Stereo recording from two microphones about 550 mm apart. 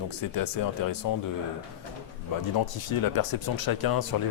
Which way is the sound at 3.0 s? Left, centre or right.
Left.